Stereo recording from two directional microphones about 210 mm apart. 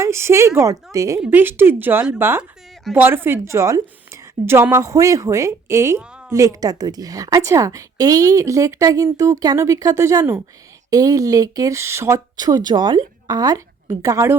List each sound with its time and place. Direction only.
0.0 s a woman's voice: 15° right (ahead or behind)